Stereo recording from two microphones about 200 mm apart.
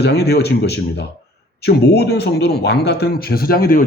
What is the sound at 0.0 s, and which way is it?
A man's voice, 55° left (ahead or behind).